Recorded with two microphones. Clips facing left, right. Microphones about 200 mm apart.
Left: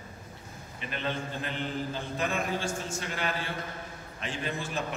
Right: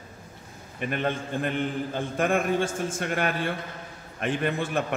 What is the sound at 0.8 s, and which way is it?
A man's voice, 55° right (ahead or behind).